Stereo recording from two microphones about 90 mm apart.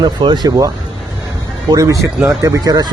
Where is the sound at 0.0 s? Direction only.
60° right (ahead or behind).